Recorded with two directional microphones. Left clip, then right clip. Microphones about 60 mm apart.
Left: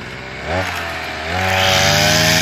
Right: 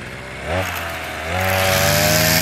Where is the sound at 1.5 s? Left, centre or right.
Centre.